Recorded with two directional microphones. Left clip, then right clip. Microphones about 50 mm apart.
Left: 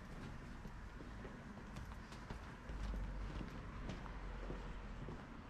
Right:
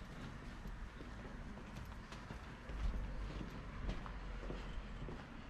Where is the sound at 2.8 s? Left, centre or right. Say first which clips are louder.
Right 1 dB; left.